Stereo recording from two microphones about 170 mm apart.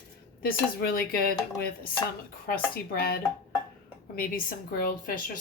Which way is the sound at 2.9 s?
65° left (ahead or behind).